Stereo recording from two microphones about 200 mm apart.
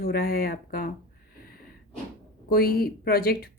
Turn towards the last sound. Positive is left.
turn(degrees=50)  # may be behind; listen again after turning